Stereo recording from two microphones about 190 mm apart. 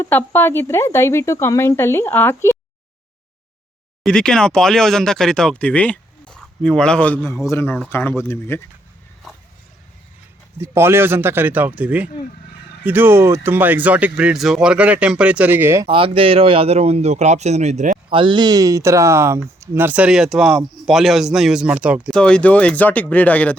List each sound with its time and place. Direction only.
0.0 s speech: 10° left (ahead or behind)
4.0 s speech: 5° left (ahead or behind)
10.6 s speech: 15° right (ahead or behind)
15.9 s a man's voice: 30° right (ahead or behind)
18.2 s speech: 25° right (ahead or behind); by 22.2 s 5° right (ahead or behind)
22.2 s speech: 5° left (ahead or behind)